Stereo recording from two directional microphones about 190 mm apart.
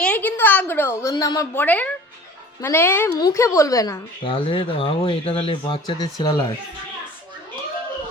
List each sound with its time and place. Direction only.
0.0 s speech: 10° left (ahead or behind)